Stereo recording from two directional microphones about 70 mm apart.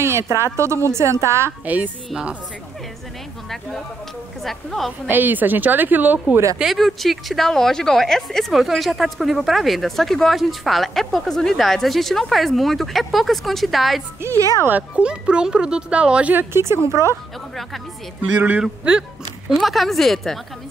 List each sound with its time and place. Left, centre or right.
0.0 s a woman's voice: right
4.4 s a woman's voice: centre
5.0 s speech: right
6.6 s a woman's voice: centre
14.7 s speech: right
16.3 s a woman's voice: right
18.3 s speech: right
18.6 s speech: centre
19.6 s a woman's voice: centre